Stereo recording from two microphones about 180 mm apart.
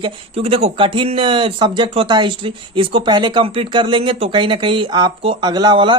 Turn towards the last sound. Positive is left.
turn(degrees=-25)  # may be behind; listen again after turning